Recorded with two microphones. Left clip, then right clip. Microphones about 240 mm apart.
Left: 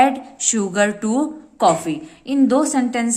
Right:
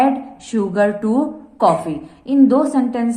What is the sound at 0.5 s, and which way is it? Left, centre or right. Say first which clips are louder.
A woman's voice: right 3 dB; left.